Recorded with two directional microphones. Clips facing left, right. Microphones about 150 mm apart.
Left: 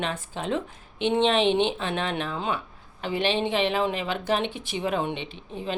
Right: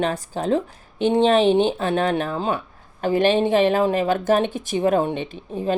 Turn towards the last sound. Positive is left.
turn(degrees=-45)  # may be behind; listen again after turning